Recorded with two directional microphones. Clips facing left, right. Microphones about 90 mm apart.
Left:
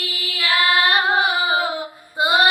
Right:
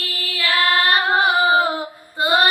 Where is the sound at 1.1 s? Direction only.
40° right (ahead or behind).